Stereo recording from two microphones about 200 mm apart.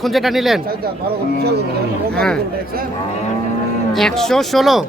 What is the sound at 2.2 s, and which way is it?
Speech, 5° left (ahead or behind).